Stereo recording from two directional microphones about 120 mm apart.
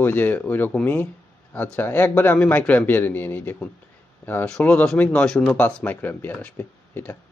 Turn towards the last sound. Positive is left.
turn(degrees=15)  # may be behind; listen again after turning